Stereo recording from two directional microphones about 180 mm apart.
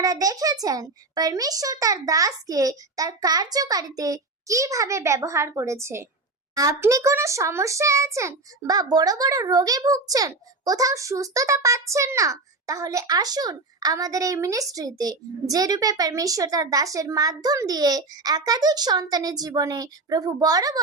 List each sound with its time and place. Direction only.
0.0 s a child's voice: 20° right (ahead or behind)